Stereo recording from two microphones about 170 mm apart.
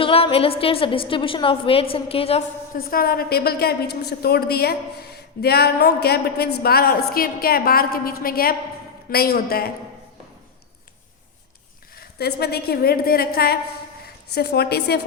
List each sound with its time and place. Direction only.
0.0 s a woman's voice: 35° left (ahead or behind)
2.7 s a woman's voice: 60° left (ahead or behind)
11.9 s a woman's voice: 65° left (ahead or behind)